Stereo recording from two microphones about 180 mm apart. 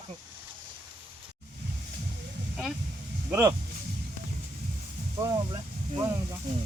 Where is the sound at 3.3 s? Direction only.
15° right (ahead or behind).